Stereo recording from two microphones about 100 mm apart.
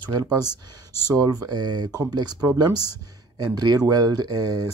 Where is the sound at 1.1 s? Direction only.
40° right (ahead or behind).